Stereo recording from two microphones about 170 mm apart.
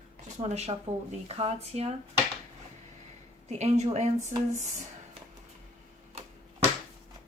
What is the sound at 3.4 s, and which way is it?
Speech, 40° right (ahead or behind).